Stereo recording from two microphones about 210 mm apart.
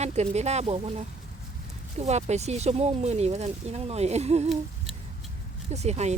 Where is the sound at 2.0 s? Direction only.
30° right (ahead or behind).